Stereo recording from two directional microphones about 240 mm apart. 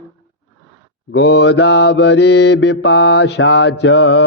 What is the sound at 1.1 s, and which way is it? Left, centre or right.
Mantra, left.